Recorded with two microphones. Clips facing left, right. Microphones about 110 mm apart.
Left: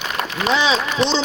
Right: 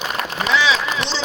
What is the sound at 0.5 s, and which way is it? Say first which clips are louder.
Speech: even; 25° left (ahead or behind).